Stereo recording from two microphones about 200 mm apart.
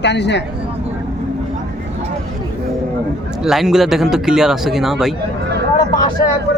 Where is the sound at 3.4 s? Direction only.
Centre (ahead or behind).